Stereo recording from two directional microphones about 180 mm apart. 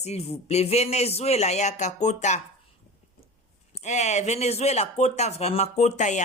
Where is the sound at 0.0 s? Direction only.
35° left (ahead or behind).